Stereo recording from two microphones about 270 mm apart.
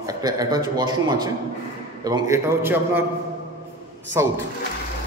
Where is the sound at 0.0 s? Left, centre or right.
Centre.